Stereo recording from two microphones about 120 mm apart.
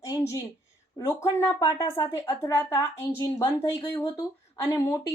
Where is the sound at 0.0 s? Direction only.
25° left (ahead or behind).